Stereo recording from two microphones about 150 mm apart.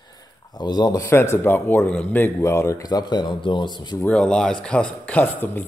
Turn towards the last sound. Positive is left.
turn(degrees=10)  # may be behind; listen again after turning